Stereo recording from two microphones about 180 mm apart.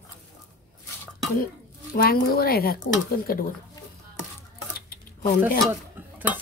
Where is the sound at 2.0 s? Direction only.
55° left (ahead or behind).